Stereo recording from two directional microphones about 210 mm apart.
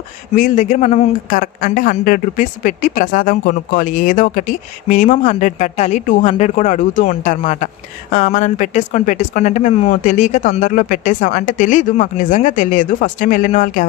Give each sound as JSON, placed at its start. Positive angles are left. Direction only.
{"t": 0.4, "sound": "a man's voice", "side_deg": 35}